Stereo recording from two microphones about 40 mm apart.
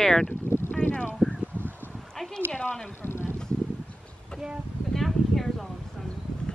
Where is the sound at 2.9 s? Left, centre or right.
Left.